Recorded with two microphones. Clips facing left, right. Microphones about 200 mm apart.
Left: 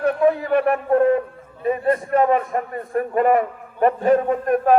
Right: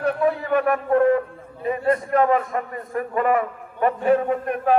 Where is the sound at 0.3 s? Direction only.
35° left (ahead or behind).